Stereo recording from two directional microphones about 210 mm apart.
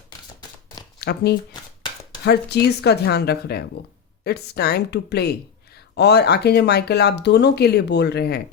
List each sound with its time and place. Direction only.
1.0 s speech: 50° left (ahead or behind)